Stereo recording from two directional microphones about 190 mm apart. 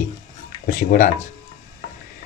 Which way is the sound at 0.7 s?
45° left (ahead or behind).